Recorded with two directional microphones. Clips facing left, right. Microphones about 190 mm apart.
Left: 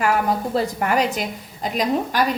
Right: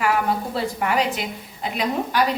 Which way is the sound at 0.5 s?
45° left (ahead or behind).